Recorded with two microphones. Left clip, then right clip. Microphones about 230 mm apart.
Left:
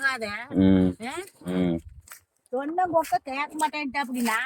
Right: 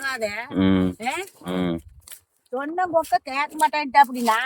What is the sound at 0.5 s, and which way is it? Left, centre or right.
Speech, centre.